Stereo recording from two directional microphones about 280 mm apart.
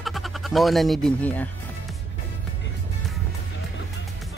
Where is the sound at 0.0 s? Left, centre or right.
Centre.